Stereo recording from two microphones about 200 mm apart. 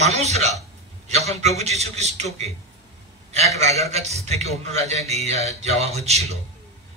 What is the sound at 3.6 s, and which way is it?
A man's voice, 35° right (ahead or behind).